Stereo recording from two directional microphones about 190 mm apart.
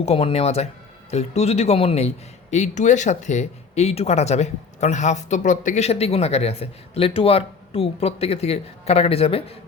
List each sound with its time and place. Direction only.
0.0 s a man's voice: 30° left (ahead or behind)